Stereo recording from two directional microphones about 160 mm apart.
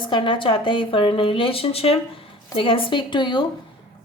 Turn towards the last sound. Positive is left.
turn(degrees=30)  # may be behind; listen again after turning